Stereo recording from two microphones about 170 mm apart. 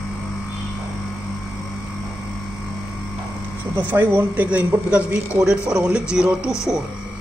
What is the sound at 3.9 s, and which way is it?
Speech, 10° right (ahead or behind).